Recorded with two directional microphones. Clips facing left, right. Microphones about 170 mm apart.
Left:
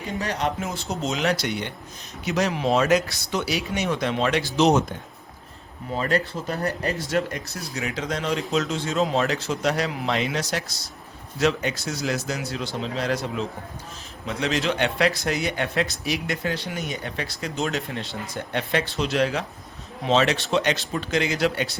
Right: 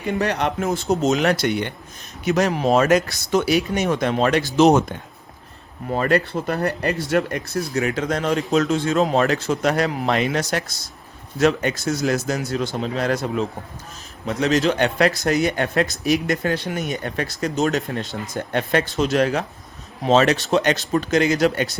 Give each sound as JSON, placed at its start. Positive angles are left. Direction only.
{"t": 0.2, "sound": "speech", "side_deg": -65}
{"t": 5.9, "sound": "speech", "side_deg": -60}